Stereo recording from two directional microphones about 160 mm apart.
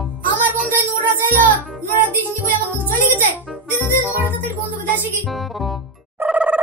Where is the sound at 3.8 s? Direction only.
10° right (ahead or behind).